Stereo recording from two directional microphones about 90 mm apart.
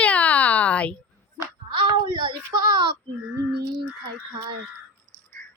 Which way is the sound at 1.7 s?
60° right (ahead or behind).